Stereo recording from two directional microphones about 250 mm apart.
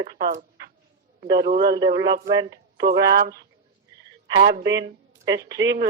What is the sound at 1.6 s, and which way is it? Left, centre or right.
Speech, centre.